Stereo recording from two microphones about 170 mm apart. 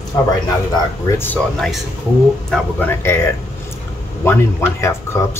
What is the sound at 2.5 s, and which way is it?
Speech, 10° left (ahead or behind).